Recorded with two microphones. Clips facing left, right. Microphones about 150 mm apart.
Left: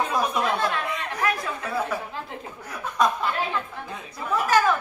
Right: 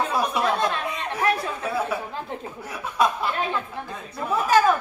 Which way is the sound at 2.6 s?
10° right (ahead or behind).